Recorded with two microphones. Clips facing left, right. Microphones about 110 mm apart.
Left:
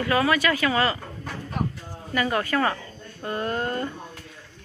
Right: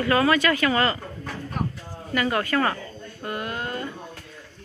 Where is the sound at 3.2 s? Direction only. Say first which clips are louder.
Left 3 dB; 30° left (ahead or behind).